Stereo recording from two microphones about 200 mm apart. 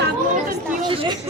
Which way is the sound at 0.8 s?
25° right (ahead or behind).